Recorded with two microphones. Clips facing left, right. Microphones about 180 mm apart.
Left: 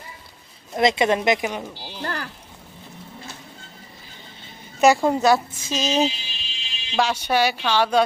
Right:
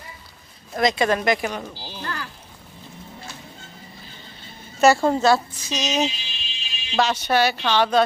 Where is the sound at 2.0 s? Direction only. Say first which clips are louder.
Left 3 dB; 45° left (ahead or behind).